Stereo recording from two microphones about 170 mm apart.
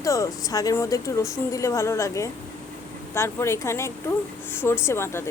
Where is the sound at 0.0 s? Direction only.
20° left (ahead or behind).